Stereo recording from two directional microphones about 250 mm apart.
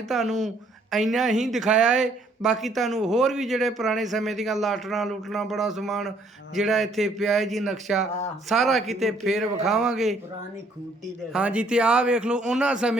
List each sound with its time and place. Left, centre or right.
0.3 s speech: right
0.9 s speech: centre
11.3 s speech: centre